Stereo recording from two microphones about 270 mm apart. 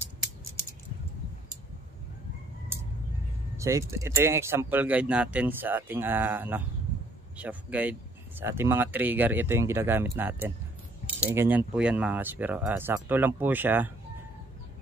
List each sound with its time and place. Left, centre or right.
3.5 s speech: centre